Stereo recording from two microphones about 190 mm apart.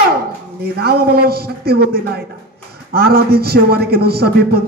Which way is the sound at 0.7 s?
55° right (ahead or behind).